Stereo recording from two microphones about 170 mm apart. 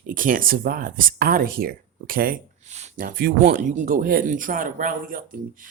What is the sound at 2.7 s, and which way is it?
Speech, 45° right (ahead or behind).